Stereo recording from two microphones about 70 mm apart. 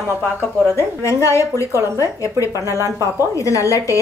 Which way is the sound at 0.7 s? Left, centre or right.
Left.